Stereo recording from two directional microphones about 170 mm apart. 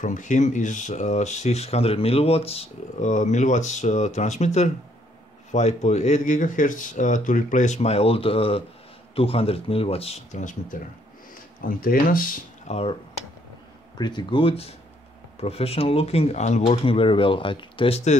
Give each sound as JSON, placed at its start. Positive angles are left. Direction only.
{"t": 0.0, "sound": "speech", "side_deg": 50}
{"t": 11.6, "sound": "speech", "side_deg": 60}
{"t": 12.6, "sound": "speech", "side_deg": 35}
{"t": 13.9, "sound": "speech", "side_deg": 25}